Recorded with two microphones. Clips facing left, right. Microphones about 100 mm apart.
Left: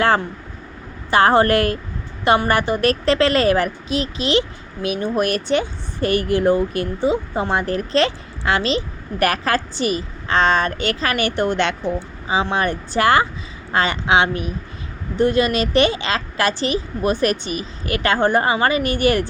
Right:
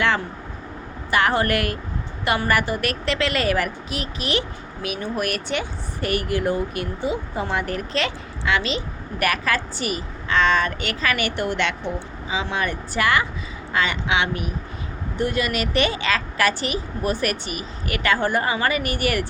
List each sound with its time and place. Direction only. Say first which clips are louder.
1.1 s a woman's voice: left 6 dB; 30° left (ahead or behind)